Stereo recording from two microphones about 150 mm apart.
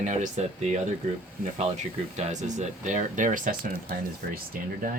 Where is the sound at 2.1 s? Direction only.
50° right (ahead or behind).